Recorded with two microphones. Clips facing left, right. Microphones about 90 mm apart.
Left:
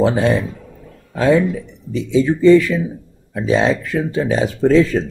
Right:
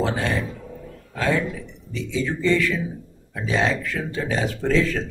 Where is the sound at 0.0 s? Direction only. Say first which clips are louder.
Left 8 dB; 20° left (ahead or behind).